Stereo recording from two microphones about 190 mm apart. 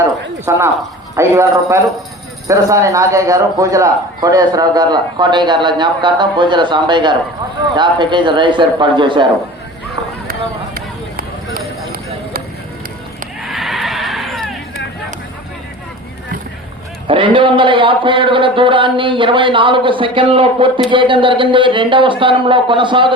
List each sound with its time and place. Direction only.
0.5 s a man's voice: 15° right (ahead or behind)
13.4 s neigh: centre (ahead or behind)
17.1 s a man's voice: 25° right (ahead or behind)